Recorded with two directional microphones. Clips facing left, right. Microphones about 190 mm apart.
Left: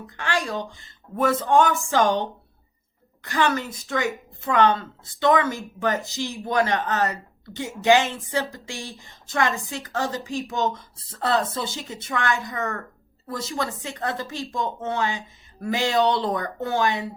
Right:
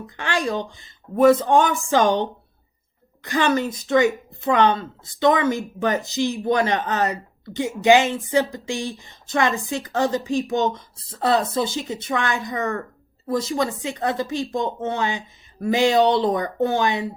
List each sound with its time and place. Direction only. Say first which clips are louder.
0.2 s speech: right 3 dB; 20° right (ahead or behind)
3.2 s speech: right 3 dB; 20° right (ahead or behind)